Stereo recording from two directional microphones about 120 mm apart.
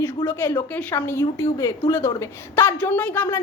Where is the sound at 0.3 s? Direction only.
20° left (ahead or behind).